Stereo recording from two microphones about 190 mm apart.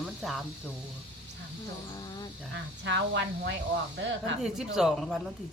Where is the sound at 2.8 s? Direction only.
65° right (ahead or behind).